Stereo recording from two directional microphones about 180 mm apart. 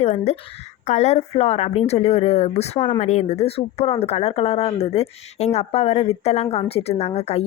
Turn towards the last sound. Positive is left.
turn(degrees=35)  # may be behind; listen again after turning